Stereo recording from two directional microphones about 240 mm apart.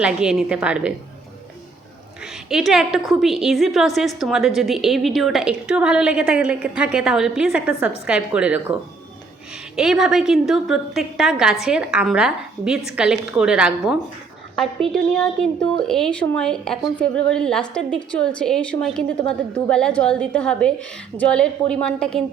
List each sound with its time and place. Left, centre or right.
0.0 s a woman's voice: centre
2.2 s a woman's voice: centre
9.7 s a woman's voice: centre